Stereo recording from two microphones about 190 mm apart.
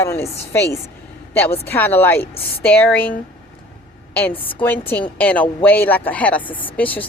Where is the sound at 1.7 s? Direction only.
10° left (ahead or behind).